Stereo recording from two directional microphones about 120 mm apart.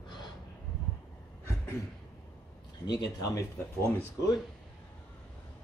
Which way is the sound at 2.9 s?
40° left (ahead or behind).